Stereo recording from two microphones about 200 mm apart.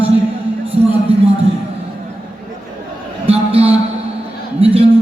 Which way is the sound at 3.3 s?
30° right (ahead or behind).